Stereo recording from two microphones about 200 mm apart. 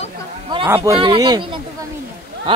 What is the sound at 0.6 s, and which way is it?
Speech, 15° right (ahead or behind).